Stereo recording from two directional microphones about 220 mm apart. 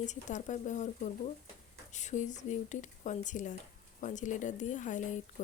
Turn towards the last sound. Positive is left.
turn(degrees=35)  # may be behind; listen again after turning